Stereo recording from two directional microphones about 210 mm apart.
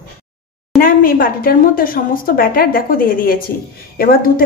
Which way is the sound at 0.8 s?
40° left (ahead or behind).